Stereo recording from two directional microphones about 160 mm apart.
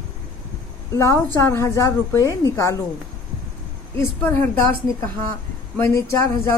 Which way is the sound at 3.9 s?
15° left (ahead or behind).